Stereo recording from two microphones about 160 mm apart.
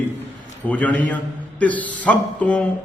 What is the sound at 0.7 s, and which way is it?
A man's voice, 10° left (ahead or behind).